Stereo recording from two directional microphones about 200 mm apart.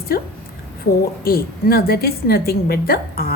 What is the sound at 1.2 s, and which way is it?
A woman's voice, 50° left (ahead or behind).